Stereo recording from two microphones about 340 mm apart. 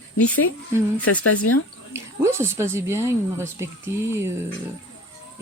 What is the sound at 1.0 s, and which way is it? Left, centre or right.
Speech, left.